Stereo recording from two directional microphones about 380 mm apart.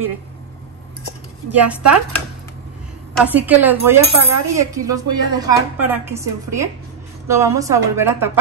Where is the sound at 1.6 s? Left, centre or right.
Centre.